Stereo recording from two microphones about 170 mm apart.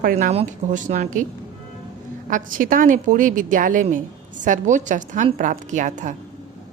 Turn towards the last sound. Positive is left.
turn(degrees=-45)  # may be behind; listen again after turning